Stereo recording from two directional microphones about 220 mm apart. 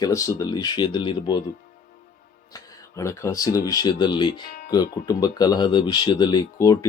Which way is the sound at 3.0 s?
10° left (ahead or behind).